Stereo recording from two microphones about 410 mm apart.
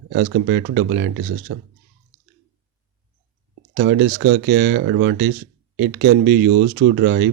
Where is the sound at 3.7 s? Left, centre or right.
Right.